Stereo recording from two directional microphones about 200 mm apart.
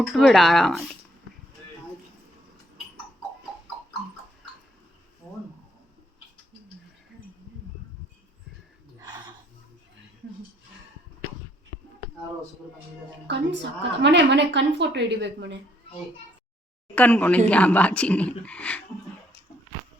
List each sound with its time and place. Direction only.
0.0 s speech: centre (ahead or behind)
9.0 s a sound: 20° right (ahead or behind)
13.2 s a woman's voice: 65° right (ahead or behind)
16.9 s speech: 5° left (ahead or behind)